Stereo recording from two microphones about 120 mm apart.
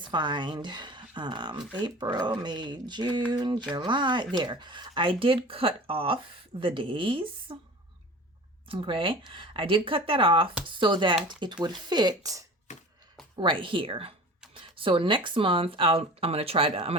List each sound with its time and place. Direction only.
0.0 s speech: 40° right (ahead or behind)
8.6 s speech: 45° right (ahead or behind); by 12.5 s 30° right (ahead or behind)
13.3 s speech: 45° right (ahead or behind)